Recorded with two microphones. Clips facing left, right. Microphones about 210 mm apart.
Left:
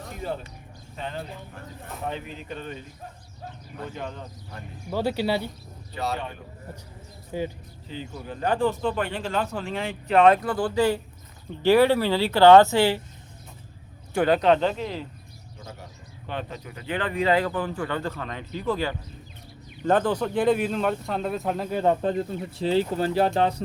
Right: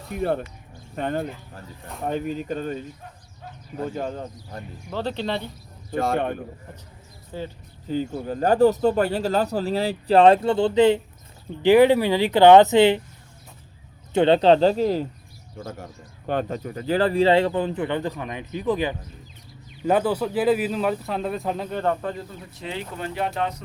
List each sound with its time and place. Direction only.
0.1 s speech: 60° right (ahead or behind); by 2.7 s 40° right (ahead or behind)
3.8 s speech: 40° right (ahead or behind)
4.9 s speech: 10° left (ahead or behind)
5.9 s speech: 50° right (ahead or behind)
7.3 s speech: 15° left (ahead or behind)
7.9 s speech: 45° right (ahead or behind); by 13.0 s 20° right (ahead or behind)
14.1 s speech: 25° right (ahead or behind); by 21.9 s 10° left (ahead or behind)
22.0 s speech: 30° left (ahead or behind)